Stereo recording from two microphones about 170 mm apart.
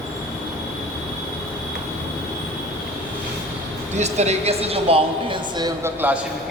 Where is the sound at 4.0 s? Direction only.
40° right (ahead or behind); by 5.9 s 25° right (ahead or behind).